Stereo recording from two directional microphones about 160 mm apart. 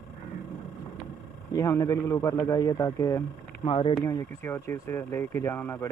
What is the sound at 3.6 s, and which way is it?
Speech, 35° left (ahead or behind).